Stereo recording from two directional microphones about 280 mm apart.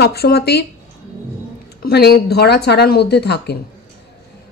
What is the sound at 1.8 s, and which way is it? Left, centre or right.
Speech, left.